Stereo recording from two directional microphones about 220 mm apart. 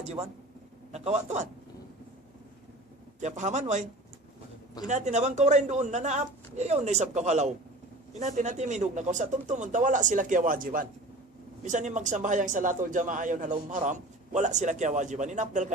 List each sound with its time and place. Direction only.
0.0 s a man's voice: 30° right (ahead or behind)
3.2 s speech: 35° right (ahead or behind)
4.9 s speech: 30° right (ahead or behind)